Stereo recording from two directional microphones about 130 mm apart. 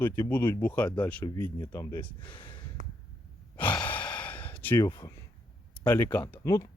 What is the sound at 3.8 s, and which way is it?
Gasp, 10° left (ahead or behind).